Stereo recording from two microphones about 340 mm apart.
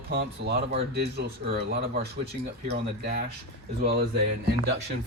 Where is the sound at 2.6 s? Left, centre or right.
Right.